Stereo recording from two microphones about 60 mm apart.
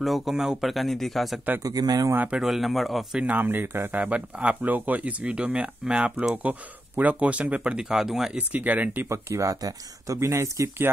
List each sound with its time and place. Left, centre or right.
0.0 s speech: centre
1.6 s speech: right
2.4 s speech: centre
3.3 s speech: right
3.9 s speech: right; by 8.3 s centre
8.4 s speech: right
9.1 s speech: right
9.5 s speech: right
10.1 s speech: right